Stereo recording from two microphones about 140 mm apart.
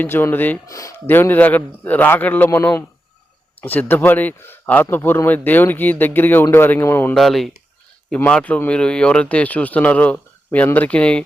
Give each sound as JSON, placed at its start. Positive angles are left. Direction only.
{"t": 0.0, "sound": "speech", "side_deg": 15}
{"t": 7.2, "sound": "speech", "side_deg": 0}